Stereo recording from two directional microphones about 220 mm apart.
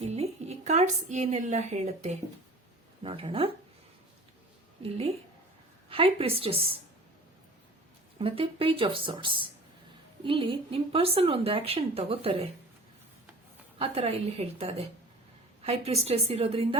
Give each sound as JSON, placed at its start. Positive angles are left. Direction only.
{"t": 0.0, "sound": "a woman's voice", "side_deg": -30}
{"t": 4.8, "sound": "a woman's voice", "side_deg": -25}
{"t": 8.2, "sound": "a woman's voice", "side_deg": -25}
{"t": 13.7, "sound": "a woman's voice", "side_deg": -25}